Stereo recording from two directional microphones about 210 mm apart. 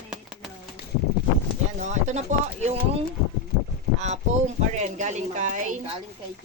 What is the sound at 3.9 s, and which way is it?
Speech, 35° right (ahead or behind).